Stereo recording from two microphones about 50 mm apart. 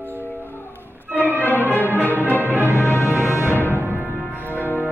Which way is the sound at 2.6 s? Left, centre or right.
Left.